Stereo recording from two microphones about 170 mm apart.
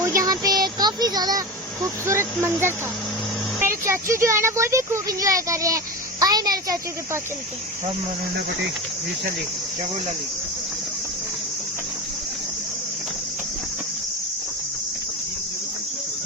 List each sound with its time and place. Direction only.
0.0 s a sound: 20° right (ahead or behind)
2.0 s speech: 15° right (ahead or behind)
3.8 s speech: 15° right (ahead or behind)